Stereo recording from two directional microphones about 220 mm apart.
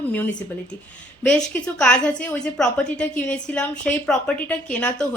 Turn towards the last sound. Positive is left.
turn(degrees=5)  # may be behind; listen again after turning